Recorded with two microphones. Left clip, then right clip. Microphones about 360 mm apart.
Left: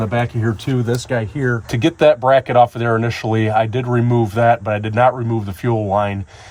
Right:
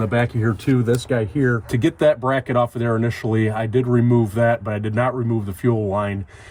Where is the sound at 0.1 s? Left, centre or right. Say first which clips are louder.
Left 1 dB; centre.